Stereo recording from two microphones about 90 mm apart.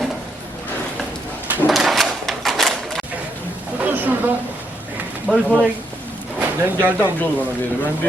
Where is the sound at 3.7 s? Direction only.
20° right (ahead or behind).